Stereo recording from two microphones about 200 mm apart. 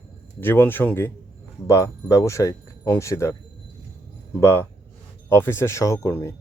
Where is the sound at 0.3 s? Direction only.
10° left (ahead or behind).